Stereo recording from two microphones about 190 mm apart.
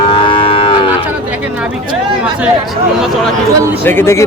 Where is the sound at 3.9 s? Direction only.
15° left (ahead or behind).